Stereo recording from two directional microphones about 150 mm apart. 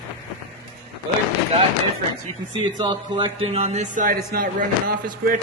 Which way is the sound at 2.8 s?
30° right (ahead or behind).